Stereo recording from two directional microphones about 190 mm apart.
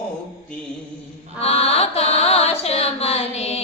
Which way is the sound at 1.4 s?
35° left (ahead or behind).